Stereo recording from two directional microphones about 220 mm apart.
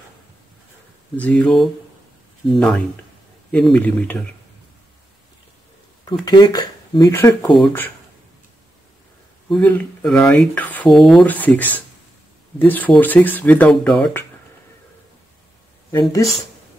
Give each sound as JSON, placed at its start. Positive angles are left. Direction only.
{"t": 1.1, "sound": "speech", "side_deg": 5}
{"t": 6.2, "sound": "speech", "side_deg": 20}
{"t": 9.5, "sound": "speech", "side_deg": 5}
{"t": 15.9, "sound": "speech", "side_deg": 15}